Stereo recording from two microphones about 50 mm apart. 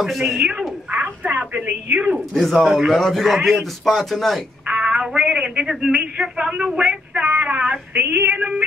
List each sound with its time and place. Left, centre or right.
0.1 s a man's voice: centre
0.4 s speech: centre
0.9 s speech: right
2.1 s a man's voice: centre
4.6 s speech: centre
6.6 s a sound: centre